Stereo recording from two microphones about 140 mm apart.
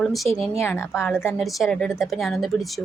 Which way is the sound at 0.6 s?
15° left (ahead or behind).